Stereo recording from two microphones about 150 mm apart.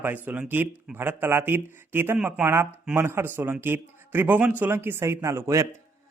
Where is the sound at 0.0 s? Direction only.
10° right (ahead or behind).